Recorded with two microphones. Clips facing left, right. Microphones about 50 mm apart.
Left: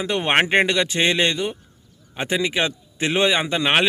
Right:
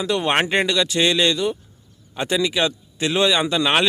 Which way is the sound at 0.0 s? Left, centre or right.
Left.